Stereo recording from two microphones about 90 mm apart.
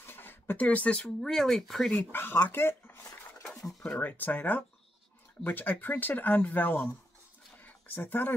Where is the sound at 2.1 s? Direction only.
25° left (ahead or behind).